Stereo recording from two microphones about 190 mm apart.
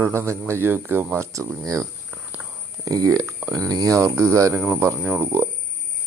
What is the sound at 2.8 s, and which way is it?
Speech, 20° right (ahead or behind).